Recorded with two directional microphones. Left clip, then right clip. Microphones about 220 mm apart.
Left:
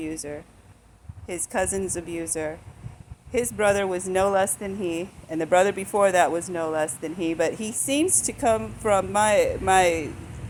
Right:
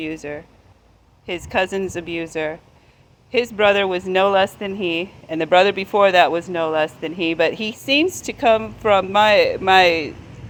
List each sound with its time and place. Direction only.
0.0 s a woman's voice: 20° right (ahead or behind)